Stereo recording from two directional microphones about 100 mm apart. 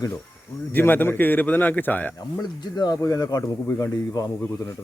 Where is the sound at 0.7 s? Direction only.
20° left (ahead or behind).